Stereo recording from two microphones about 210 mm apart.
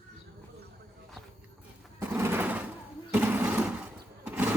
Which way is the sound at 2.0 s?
10° right (ahead or behind).